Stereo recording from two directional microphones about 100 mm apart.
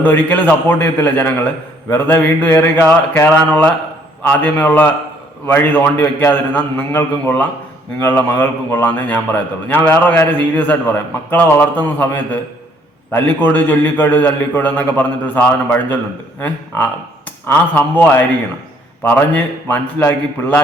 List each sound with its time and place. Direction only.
0.0 s a man's voice: 15° left (ahead or behind)